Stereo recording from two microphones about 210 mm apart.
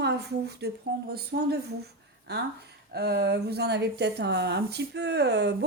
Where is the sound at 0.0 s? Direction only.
50° right (ahead or behind).